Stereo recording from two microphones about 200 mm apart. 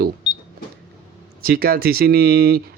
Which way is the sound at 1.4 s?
50° right (ahead or behind).